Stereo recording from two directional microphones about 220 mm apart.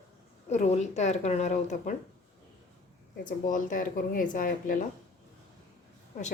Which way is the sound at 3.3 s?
35° left (ahead or behind).